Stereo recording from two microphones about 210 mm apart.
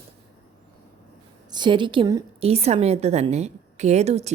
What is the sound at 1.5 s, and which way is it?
A woman's voice, 20° right (ahead or behind).